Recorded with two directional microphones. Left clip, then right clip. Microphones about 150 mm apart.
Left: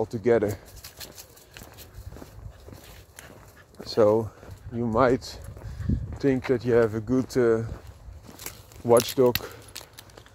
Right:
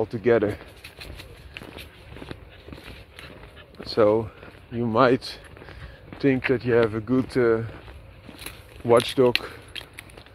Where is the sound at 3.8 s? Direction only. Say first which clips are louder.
Right 1 dB; 30° left (ahead or behind).